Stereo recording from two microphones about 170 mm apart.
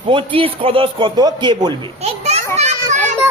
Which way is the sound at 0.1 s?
30° right (ahead or behind).